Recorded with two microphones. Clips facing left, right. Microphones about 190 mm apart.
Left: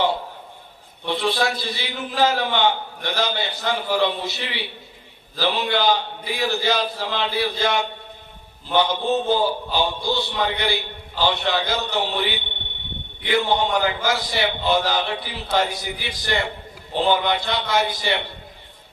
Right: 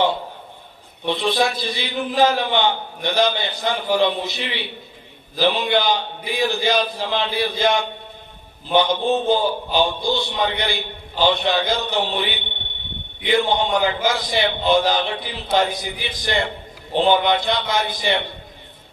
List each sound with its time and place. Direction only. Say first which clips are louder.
1.0 s a man's voice: right 2 dB; 20° right (ahead or behind)
5.3 s mantra: right 4 dB; 15° right (ahead or behind)
13.2 s a man's voice: right 2 dB; 15° right (ahead or behind)
16.9 s mantra: right 3 dB; 20° right (ahead or behind)